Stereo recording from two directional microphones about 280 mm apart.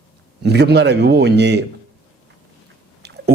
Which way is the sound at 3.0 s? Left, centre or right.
Right.